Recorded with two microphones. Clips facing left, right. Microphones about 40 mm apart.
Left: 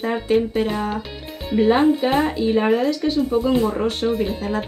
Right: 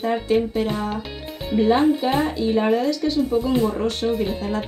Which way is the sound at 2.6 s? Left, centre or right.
Centre.